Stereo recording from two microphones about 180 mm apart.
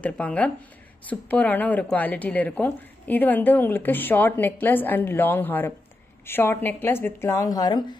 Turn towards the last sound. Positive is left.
turn(degrees=20)  # may be behind; listen again after turning